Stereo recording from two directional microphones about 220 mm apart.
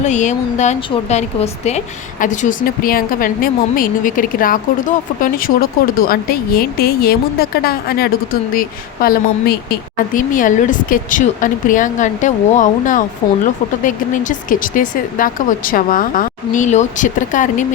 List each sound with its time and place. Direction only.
0.0 s a woman's voice: 35° left (ahead or behind)